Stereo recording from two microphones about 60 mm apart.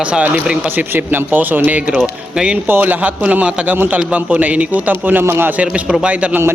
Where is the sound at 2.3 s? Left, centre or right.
Centre.